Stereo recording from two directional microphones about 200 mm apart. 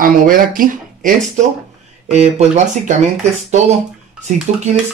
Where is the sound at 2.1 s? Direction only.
35° right (ahead or behind).